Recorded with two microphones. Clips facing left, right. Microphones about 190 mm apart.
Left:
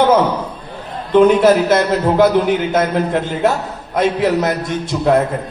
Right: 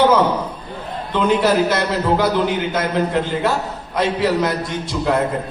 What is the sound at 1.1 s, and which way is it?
A man's voice, 50° left (ahead or behind).